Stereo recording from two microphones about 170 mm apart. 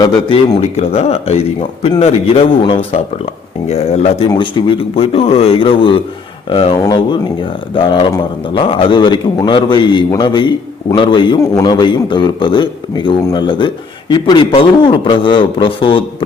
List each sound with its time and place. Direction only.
0.0 s a man's voice: 30° left (ahead or behind)